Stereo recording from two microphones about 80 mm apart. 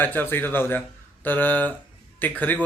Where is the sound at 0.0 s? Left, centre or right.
Left.